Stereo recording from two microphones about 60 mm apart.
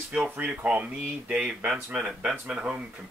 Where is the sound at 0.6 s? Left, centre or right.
Right.